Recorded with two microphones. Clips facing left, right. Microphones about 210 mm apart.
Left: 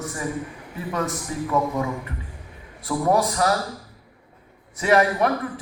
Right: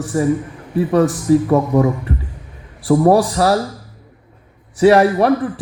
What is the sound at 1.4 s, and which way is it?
A man's voice, 45° right (ahead or behind).